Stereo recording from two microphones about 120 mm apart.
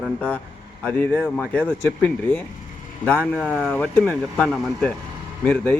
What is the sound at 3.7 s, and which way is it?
Speech, 15° left (ahead or behind).